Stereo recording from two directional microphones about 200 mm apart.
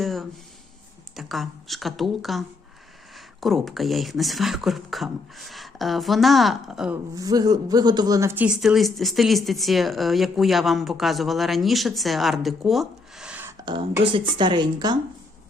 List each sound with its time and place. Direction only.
0.0 s a sound: centre (ahead or behind)
1.1 s speech: centre (ahead or behind)
7.2 s speech: 20° right (ahead or behind)
14.0 s speech: 25° right (ahead or behind)